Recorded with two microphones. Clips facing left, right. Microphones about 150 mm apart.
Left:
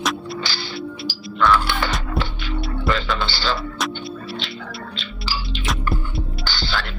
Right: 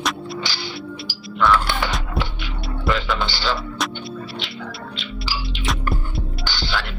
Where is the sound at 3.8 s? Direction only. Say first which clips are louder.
Left 1 dB; centre (ahead or behind).